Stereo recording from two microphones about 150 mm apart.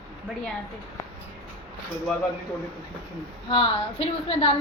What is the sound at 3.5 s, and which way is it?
Speech, 35° left (ahead or behind).